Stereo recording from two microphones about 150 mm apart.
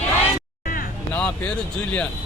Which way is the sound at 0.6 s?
70° left (ahead or behind).